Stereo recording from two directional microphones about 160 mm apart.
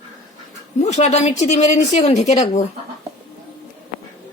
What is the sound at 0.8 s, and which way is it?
Speech, 45° left (ahead or behind).